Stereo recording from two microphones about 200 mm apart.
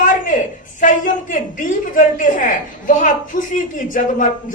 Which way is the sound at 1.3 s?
40° left (ahead or behind).